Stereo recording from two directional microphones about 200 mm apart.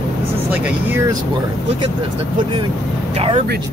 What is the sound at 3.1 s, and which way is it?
Speech, 35° right (ahead or behind).